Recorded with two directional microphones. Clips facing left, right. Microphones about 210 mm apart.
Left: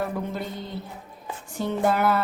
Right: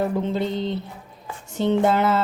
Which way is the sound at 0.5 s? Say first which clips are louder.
Right 8 dB; 20° right (ahead or behind).